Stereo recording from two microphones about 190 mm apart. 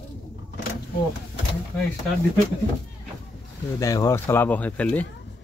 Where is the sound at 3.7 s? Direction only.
15° left (ahead or behind).